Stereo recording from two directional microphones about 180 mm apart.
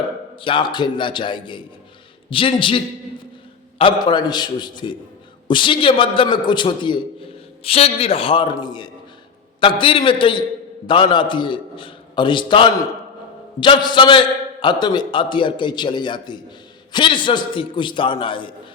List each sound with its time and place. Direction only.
0.4 s a man's voice: 25° left (ahead or behind)